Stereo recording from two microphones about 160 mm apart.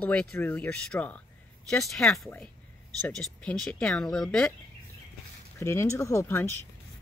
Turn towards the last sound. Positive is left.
turn(degrees=15)  # may be behind; listen again after turning